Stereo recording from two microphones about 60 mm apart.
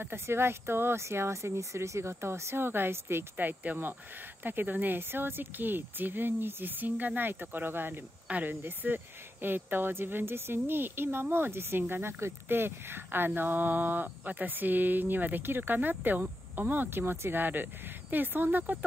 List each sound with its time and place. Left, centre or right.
0.0 s speech: right